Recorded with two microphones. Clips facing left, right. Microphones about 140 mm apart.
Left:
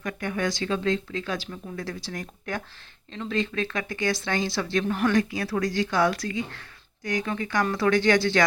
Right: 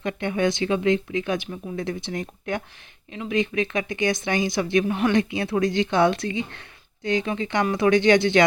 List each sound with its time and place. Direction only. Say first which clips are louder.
0.0 s speech: right 5 dB; 25° right (ahead or behind)